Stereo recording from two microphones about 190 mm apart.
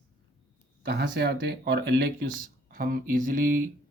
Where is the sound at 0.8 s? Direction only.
60° right (ahead or behind).